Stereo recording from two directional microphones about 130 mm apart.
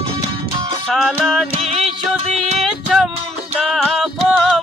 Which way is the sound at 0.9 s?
Centre (ahead or behind).